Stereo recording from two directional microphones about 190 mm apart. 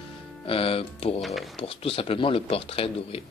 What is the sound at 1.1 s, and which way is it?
Speech, centre (ahead or behind).